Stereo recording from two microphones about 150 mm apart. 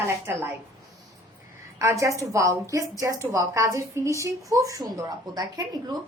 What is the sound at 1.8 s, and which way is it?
A woman's voice, 20° right (ahead or behind).